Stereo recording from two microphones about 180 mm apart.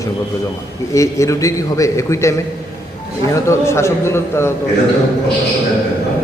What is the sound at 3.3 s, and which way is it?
A man's voice, 15° left (ahead or behind).